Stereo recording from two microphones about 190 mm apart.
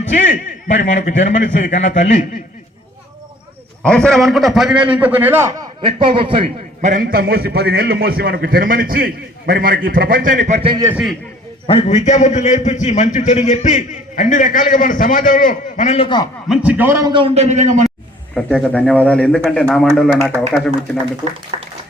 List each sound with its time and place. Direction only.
0.1 s a man's voice: 40° left (ahead or behind)
3.8 s a man's voice: 5° left (ahead or behind); by 6.9 s 30° right (ahead or behind)
6.9 s a man's voice: 50° right (ahead or behind)
10.6 s a man's voice: 30° right (ahead or behind)
10.8 s a man's voice: 5° right (ahead or behind)
11.6 s a man's voice: 35° left (ahead or behind)
16.5 s a man's voice: 5° right (ahead or behind)
17.1 s a man's voice: 30° right (ahead or behind)
18.3 s speech: 5° left (ahead or behind)
21.5 s a man's voice: 30° right (ahead or behind)